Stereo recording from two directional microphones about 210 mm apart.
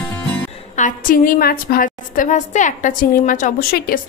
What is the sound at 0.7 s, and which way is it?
A woman's voice, 40° left (ahead or behind).